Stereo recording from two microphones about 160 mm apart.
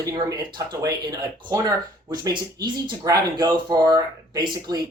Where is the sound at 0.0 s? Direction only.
25° right (ahead or behind).